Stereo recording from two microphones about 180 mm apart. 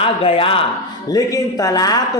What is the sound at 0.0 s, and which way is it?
Speech, 30° left (ahead or behind).